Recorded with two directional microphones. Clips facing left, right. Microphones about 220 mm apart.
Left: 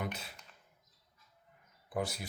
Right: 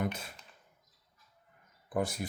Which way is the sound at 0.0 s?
50° right (ahead or behind).